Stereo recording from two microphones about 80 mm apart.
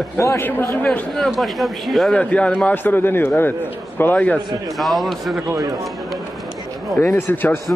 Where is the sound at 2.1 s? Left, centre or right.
Centre.